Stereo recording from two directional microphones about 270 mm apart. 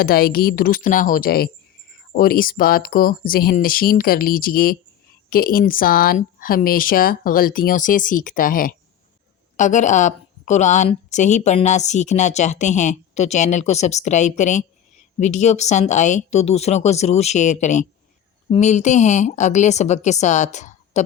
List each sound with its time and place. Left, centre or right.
0.0 s a woman's voice: left